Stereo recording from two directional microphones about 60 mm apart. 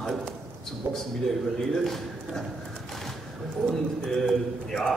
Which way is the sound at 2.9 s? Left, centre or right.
Centre.